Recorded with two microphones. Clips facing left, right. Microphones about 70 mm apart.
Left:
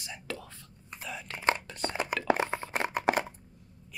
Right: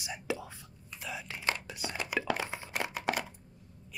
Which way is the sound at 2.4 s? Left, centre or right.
Left.